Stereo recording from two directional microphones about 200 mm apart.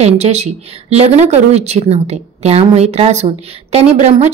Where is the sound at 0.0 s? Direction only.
35° right (ahead or behind).